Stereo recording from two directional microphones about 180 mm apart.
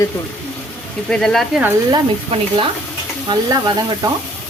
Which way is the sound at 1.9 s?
30° right (ahead or behind).